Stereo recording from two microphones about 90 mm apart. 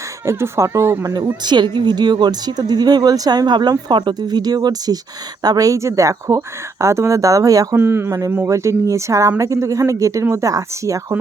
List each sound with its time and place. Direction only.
0.3 s speech: 30° right (ahead or behind)
1.0 s speech: 50° right (ahead or behind)
7.8 s speech: 25° right (ahead or behind)